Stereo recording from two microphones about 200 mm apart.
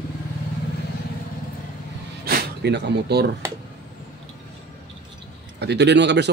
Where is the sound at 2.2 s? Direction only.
55° right (ahead or behind).